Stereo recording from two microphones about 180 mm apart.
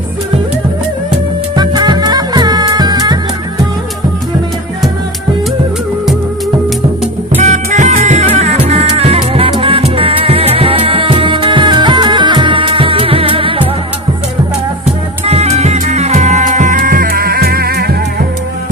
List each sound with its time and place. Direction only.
1.5 s music: 20° right (ahead or behind)
7.4 s music: 40° right (ahead or behind)
15.2 s music: 35° right (ahead or behind); by 18.3 s 60° right (ahead or behind)